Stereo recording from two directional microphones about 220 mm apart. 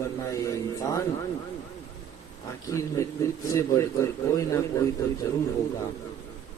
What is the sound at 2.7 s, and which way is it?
A man's voice, 15° left (ahead or behind).